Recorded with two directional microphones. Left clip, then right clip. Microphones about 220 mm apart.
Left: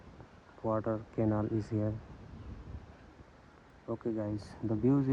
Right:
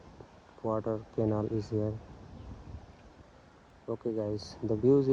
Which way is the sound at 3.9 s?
25° right (ahead or behind).